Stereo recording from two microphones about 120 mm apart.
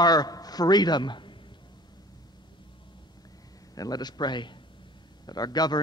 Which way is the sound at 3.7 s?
35° left (ahead or behind).